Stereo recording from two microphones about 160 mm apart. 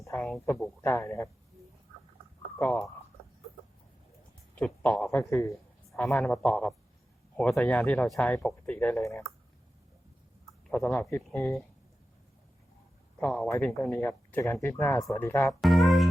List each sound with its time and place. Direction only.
0.2 s a man's voice: centre (ahead or behind)
0.8 s speech: 20° left (ahead or behind)
2.6 s speech: 5° left (ahead or behind)
4.5 s a man's voice: 5° left (ahead or behind)
10.7 s speech: 10° left (ahead or behind)
13.1 s speech: 5° left (ahead or behind)
13.5 s speech: 15° left (ahead or behind)
15.6 s music: centre (ahead or behind)